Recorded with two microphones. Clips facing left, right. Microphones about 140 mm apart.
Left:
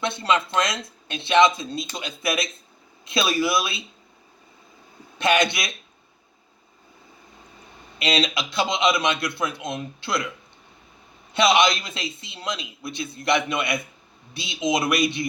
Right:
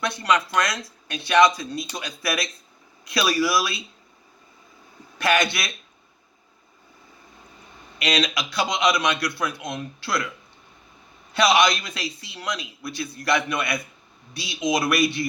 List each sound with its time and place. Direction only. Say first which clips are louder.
0.0 s a man's voice: even; 25° left (ahead or behind)
5.1 s a man's voice: left 1 dB; 20° left (ahead or behind)
7.9 s a man's voice: even; 25° left (ahead or behind)
11.3 s a man's voice: even; 25° left (ahead or behind)